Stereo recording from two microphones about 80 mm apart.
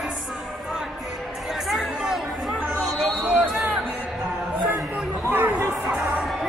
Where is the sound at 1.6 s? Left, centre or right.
Centre.